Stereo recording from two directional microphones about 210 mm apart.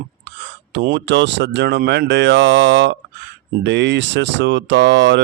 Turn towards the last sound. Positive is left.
turn(degrees=-60)  # may be behind; listen again after turning